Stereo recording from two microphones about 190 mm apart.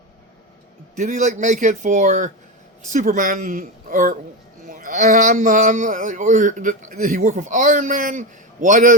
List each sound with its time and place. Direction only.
0.9 s a man's voice: 40° right (ahead or behind)